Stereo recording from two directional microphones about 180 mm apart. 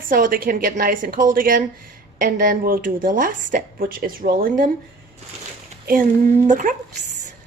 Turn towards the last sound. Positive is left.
turn(degrees=-45)  # may be behind; listen again after turning